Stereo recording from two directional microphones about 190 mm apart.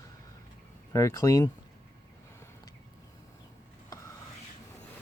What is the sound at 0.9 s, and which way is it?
Speech, 15° left (ahead or behind).